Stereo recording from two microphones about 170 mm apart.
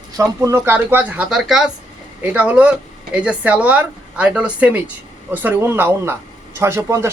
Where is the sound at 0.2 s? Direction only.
15° right (ahead or behind).